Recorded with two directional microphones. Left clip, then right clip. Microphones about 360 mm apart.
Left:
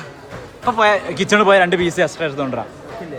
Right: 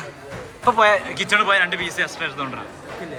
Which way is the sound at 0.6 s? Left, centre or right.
Centre.